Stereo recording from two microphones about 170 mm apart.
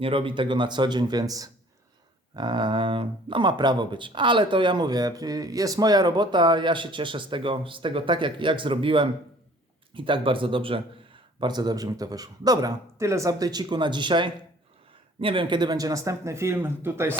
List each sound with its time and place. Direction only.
0.0 s speech: 30° right (ahead or behind); by 17.2 s 15° right (ahead or behind)